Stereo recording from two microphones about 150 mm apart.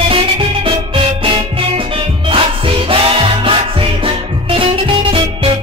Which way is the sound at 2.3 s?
40° right (ahead or behind).